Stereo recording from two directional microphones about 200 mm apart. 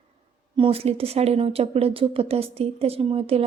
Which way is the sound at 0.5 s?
25° right (ahead or behind).